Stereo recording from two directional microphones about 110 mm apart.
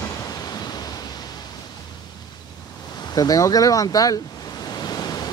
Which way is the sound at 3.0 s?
35° left (ahead or behind).